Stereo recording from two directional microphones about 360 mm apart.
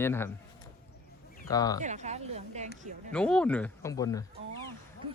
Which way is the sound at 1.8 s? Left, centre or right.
Centre.